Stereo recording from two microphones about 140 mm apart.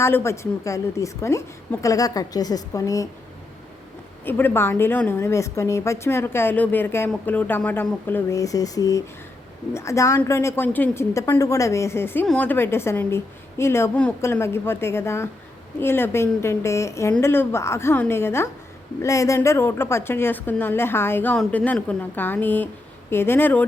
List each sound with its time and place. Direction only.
0.0 s a woman's voice: 20° left (ahead or behind)
4.3 s a woman's voice: 15° left (ahead or behind)